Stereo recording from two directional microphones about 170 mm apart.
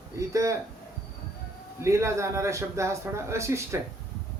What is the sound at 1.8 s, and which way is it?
Speech, 15° right (ahead or behind).